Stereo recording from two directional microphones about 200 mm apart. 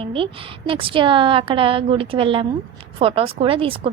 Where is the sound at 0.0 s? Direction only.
25° right (ahead or behind).